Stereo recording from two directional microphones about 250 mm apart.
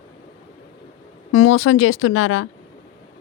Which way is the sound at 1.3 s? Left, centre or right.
Left.